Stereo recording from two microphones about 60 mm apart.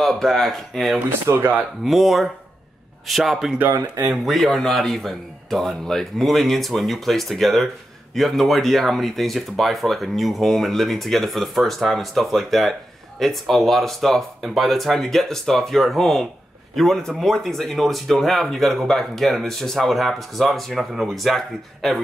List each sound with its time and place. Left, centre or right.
0.0 s speech: centre
0.9 s speech: right
1.9 s speech: centre